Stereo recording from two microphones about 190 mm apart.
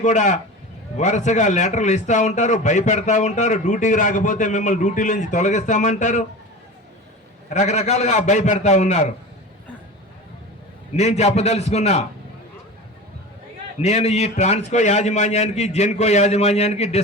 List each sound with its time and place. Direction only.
0.0 s a man's voice: 40° left (ahead or behind)
7.5 s a man's voice: 35° left (ahead or behind)
10.9 s a man's voice: 35° left (ahead or behind)
13.7 s a man's voice: 35° left (ahead or behind)